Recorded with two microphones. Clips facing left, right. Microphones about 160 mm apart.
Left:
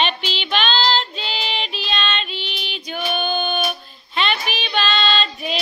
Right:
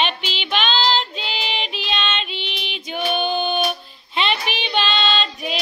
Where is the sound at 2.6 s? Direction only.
20° right (ahead or behind).